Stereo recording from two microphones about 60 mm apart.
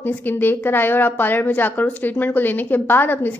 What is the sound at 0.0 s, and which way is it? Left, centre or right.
A woman's voice, left.